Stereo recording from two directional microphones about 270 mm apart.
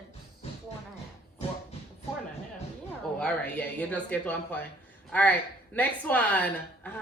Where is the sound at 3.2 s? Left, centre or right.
Centre.